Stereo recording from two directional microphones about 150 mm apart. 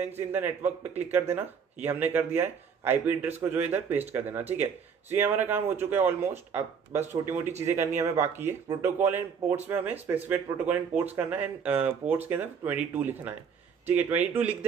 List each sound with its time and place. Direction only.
0.0 s speech: 15° right (ahead or behind)